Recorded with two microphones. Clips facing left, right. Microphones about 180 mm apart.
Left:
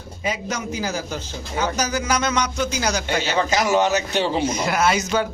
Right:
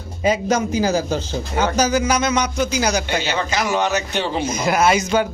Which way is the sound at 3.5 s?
40° left (ahead or behind).